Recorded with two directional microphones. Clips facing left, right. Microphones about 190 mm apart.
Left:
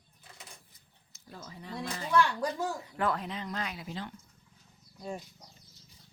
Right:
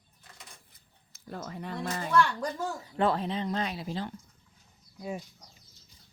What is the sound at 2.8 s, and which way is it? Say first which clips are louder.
Speech: right 4 dB; 30° right (ahead or behind).